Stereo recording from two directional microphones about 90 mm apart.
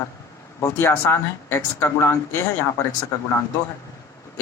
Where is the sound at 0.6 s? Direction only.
30° left (ahead or behind).